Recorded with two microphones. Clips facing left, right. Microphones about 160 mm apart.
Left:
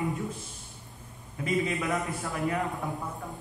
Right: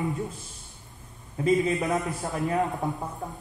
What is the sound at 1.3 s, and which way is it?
A man's voice, 35° right (ahead or behind).